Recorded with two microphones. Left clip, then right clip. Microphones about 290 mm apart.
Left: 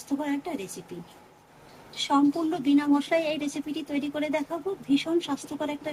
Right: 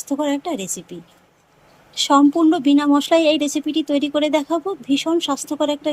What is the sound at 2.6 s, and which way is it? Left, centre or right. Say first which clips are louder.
Speech: right 8 dB; centre.